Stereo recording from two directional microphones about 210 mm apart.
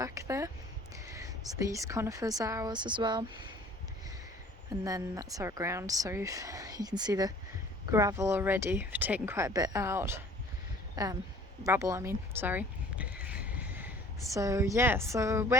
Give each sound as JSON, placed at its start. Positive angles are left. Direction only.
{"t": 0.0, "sound": "speech", "side_deg": -15}
{"t": 4.8, "sound": "speech", "side_deg": -15}
{"t": 13.2, "sound": "a sound", "side_deg": -5}